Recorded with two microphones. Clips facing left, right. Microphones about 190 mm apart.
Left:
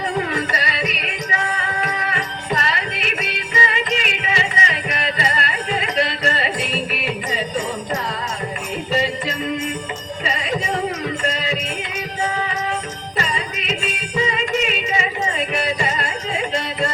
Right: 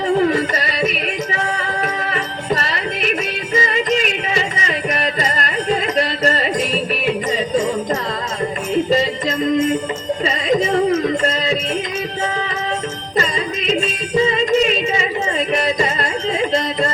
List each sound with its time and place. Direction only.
0.3 s music: 40° right (ahead or behind)
2.1 s music: 40° right (ahead or behind)
13.1 s music: 35° right (ahead or behind)